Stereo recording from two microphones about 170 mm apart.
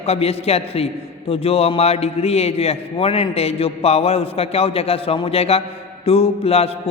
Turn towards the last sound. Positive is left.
turn(degrees=35)  # may be behind; listen again after turning